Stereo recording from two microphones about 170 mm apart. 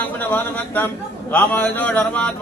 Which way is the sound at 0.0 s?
10° left (ahead or behind).